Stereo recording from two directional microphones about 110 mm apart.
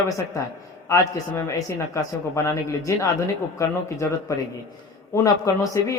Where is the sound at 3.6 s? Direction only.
30° left (ahead or behind).